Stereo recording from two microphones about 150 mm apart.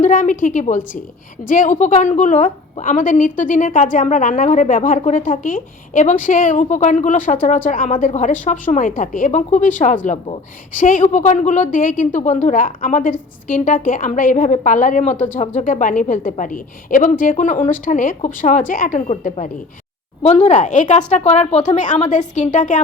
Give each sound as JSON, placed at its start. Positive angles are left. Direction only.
{"t": 0.0, "sound": "a woman's voice", "side_deg": 60}
{"t": 20.2, "sound": "a woman's voice", "side_deg": 50}